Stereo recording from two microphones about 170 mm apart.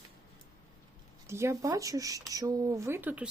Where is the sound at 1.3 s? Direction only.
15° right (ahead or behind).